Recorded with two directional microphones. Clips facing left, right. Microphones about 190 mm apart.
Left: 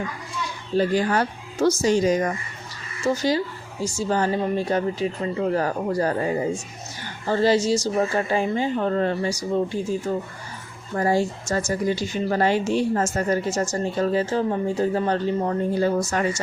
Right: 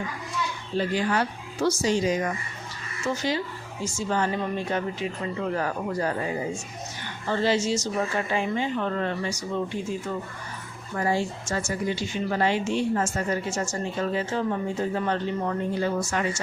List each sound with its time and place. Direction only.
0.8 s speech: 40° left (ahead or behind)